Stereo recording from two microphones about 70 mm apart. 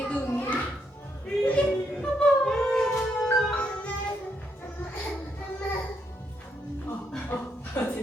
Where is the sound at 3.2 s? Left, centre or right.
Centre.